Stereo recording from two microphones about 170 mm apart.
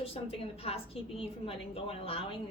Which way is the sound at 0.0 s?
35° left (ahead or behind).